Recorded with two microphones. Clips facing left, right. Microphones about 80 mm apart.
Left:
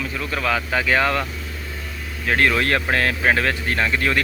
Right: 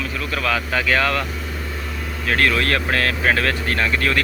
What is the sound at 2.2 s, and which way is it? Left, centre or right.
Speech, left.